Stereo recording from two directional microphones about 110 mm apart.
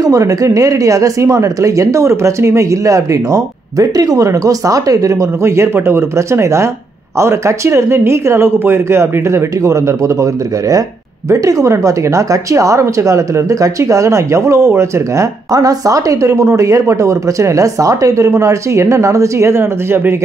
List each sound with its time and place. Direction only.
0.0 s speech: 30° right (ahead or behind)